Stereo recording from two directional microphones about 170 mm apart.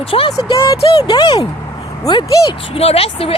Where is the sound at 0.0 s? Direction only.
35° left (ahead or behind).